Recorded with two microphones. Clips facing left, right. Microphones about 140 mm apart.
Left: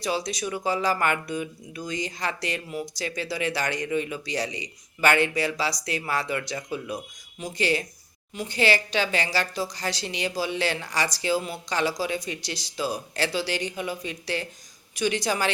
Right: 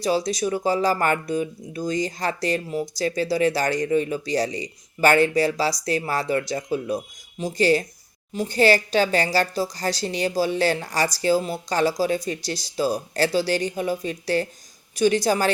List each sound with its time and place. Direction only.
0.0 s speech: 35° right (ahead or behind)